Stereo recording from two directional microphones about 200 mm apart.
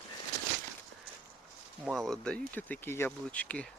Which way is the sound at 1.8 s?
Centre (ahead or behind).